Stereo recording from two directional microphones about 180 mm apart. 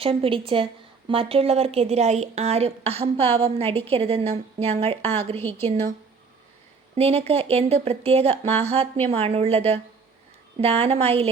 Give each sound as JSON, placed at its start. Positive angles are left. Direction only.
{"t": 0.0, "sound": "a woman's voice", "side_deg": -30}
{"t": 6.9, "sound": "a woman's voice", "side_deg": -35}